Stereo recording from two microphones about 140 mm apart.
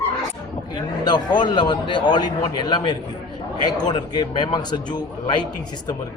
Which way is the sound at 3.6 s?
30° left (ahead or behind).